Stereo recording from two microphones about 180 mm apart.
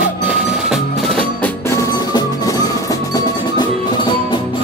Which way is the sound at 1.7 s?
15° left (ahead or behind).